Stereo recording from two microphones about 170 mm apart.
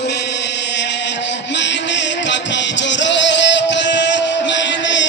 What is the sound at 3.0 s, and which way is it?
Music, 90° left.